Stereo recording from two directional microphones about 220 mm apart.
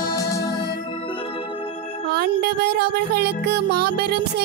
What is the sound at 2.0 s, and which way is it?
Music, 45° right (ahead or behind).